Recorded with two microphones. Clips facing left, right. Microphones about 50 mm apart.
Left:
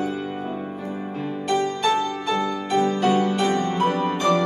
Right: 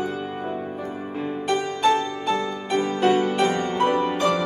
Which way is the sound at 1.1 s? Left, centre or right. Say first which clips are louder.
Right 3 dB; centre.